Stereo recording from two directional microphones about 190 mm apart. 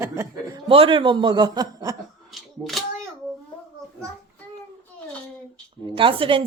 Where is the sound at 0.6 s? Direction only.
30° right (ahead or behind).